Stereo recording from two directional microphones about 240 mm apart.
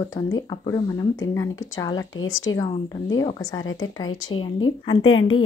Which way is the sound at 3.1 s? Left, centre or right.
Centre.